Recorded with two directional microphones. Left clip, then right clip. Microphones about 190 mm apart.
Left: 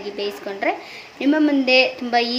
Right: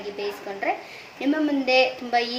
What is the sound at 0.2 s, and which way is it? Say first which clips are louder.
A woman's voice: left 5 dB; 30° left (ahead or behind).